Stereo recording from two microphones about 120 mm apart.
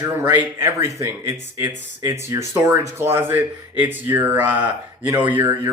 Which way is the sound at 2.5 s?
20° right (ahead or behind).